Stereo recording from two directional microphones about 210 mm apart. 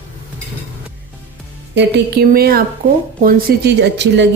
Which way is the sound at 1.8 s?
50° right (ahead or behind).